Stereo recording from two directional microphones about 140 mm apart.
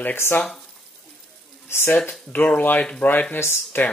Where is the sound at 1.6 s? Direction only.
15° left (ahead or behind).